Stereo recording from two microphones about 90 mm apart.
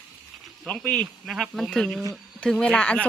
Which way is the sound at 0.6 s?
10° left (ahead or behind).